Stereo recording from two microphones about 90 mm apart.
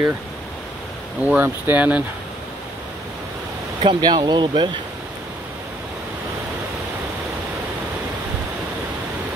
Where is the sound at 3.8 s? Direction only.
55° right (ahead or behind).